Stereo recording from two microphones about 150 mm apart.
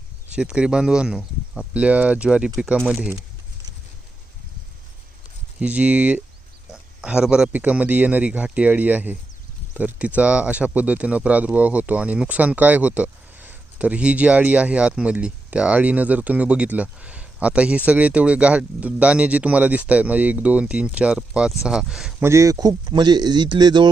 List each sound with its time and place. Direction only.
0.3 s speech: 5° right (ahead or behind)
5.5 s speech: 10° right (ahead or behind)
22.2 s speech: 20° right (ahead or behind)